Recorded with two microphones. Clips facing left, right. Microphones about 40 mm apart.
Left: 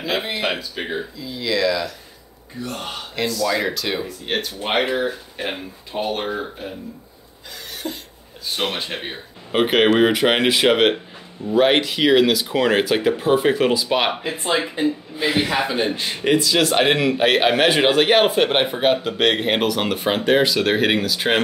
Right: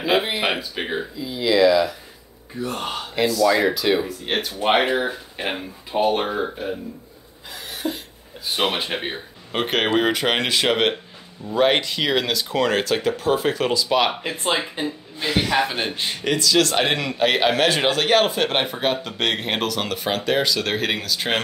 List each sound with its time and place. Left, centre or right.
0.0 s speech: centre
4.8 s speech: centre
7.7 s a sound: centre
8.5 s speech: centre
9.5 s a man's voice: centre